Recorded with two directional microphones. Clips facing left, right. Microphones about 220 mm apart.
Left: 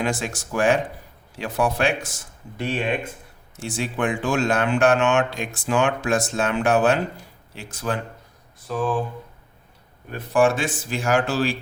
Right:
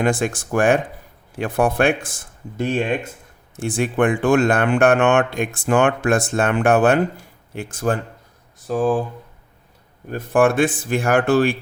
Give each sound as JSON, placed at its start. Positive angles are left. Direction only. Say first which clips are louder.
{"t": 0.0, "sound": "speech", "louder": "right 6 dB", "side_deg": -55}
{"t": 10.1, "sound": "speech", "louder": "right 3 dB", "side_deg": -50}